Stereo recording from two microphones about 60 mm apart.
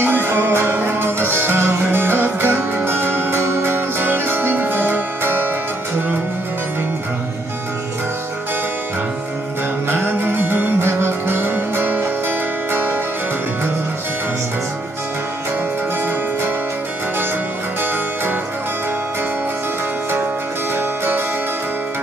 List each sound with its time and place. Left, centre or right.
0.0 s music: right
9.8 s music: right
20.7 s music: right